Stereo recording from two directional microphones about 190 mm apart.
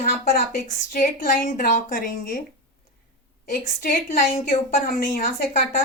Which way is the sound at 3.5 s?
45° left (ahead or behind).